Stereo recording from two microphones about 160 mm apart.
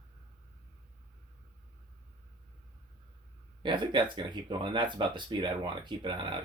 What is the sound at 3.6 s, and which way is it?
Speech, 30° right (ahead or behind).